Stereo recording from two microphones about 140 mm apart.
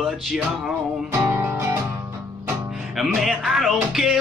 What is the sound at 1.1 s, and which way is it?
Music, 20° right (ahead or behind).